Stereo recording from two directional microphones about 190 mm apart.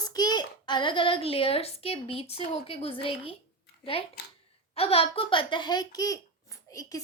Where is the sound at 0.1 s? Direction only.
20° left (ahead or behind).